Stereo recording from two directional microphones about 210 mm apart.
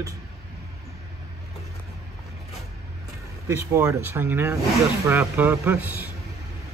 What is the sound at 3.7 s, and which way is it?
Speech, 15° right (ahead or behind).